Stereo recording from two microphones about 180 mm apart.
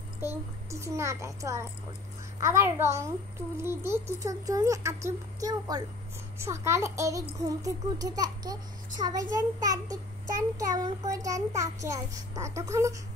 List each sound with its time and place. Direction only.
0.2 s a child's voice: 15° right (ahead or behind)